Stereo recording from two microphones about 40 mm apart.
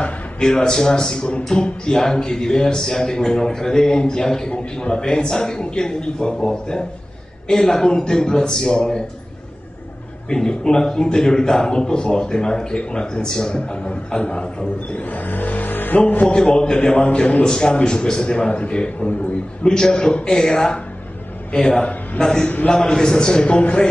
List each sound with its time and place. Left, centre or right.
0.0 s a man's voice: centre
10.3 s a man's voice: centre
15.0 s vehicle: left
16.3 s a man's voice: left
21.5 s a man's voice: left
22.4 s a man's voice: left
22.7 s a man's voice: centre